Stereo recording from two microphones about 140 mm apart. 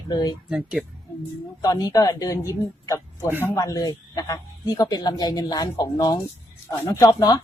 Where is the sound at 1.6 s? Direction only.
25° left (ahead or behind).